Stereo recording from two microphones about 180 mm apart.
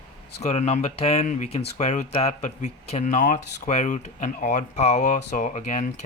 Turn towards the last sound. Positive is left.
turn(degrees=40)  # may be behind; listen again after turning